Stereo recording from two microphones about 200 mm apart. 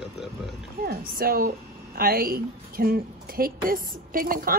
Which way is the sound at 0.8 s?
45° right (ahead or behind).